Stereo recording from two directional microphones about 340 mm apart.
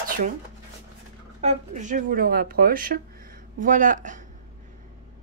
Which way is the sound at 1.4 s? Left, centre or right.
Right.